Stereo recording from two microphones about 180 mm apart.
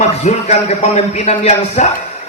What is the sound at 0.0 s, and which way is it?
A man's voice, 40° left (ahead or behind).